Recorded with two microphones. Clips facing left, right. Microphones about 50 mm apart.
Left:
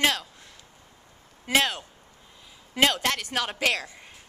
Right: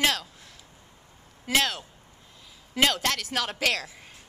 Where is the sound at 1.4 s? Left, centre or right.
Centre.